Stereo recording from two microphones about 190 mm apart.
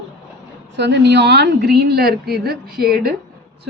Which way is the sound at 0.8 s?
65° right (ahead or behind).